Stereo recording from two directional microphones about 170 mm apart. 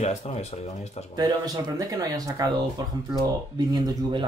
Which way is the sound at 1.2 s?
20° right (ahead or behind).